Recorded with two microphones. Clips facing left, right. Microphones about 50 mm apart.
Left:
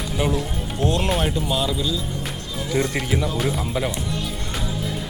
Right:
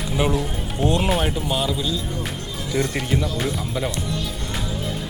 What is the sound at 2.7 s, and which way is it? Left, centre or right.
A man's voice, centre.